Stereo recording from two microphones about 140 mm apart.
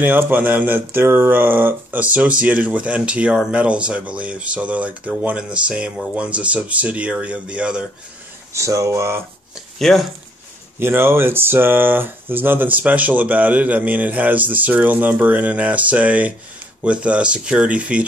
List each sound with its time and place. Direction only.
0.0 s speech: 15° right (ahead or behind)
8.5 s speech: 20° right (ahead or behind)
9.8 s speech: centre (ahead or behind)
10.8 s speech: 15° right (ahead or behind)